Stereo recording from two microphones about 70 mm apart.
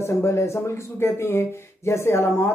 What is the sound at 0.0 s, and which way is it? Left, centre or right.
Speech, left.